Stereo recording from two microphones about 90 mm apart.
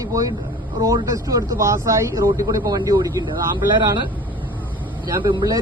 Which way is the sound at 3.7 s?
60° right (ahead or behind).